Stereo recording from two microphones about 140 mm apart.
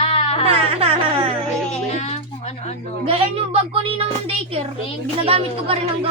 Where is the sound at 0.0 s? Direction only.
45° left (ahead or behind).